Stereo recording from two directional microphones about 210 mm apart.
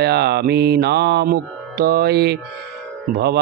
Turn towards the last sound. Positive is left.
turn(degrees=-50)  # may be behind; listen again after turning